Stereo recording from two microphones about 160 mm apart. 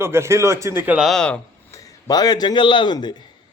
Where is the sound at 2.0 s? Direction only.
25° left (ahead or behind).